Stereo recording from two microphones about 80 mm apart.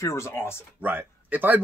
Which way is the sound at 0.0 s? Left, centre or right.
Left.